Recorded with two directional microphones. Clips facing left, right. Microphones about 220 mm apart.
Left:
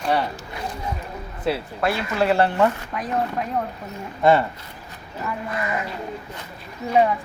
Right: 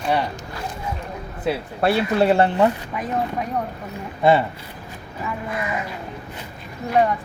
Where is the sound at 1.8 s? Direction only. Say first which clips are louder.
Right 6 dB; 30° right (ahead or behind).